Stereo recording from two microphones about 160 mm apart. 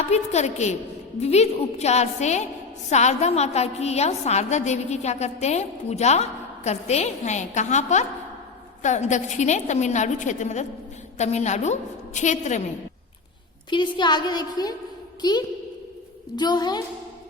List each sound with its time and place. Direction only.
0.1 s a woman's voice: 45° left (ahead or behind)
13.7 s a woman's voice: 30° left (ahead or behind)